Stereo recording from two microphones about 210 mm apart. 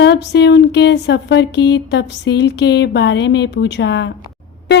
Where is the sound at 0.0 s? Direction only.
55° left (ahead or behind).